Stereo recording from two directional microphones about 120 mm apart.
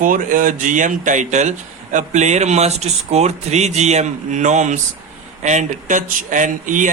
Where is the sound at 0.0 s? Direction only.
90° right.